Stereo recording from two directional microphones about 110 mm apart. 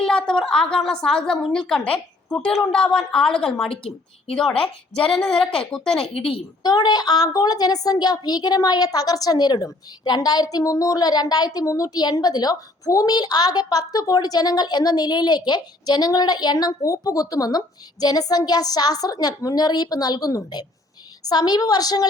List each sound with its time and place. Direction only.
0.0 s a woman's voice: 5° left (ahead or behind)
6.1 s a woman's voice: 60° left (ahead or behind)
6.6 s a woman's voice: 40° left (ahead or behind)